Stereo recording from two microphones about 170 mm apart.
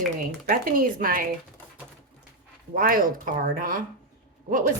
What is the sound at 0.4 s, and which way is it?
Speech, 55° right (ahead or behind).